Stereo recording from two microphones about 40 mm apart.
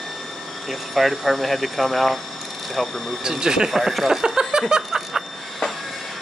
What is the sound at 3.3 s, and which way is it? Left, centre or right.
Speech, centre.